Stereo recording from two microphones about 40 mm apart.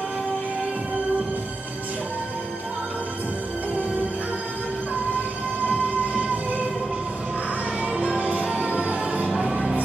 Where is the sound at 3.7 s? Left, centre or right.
Right.